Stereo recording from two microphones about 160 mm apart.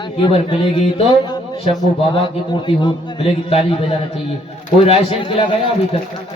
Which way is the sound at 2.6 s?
30° left (ahead or behind).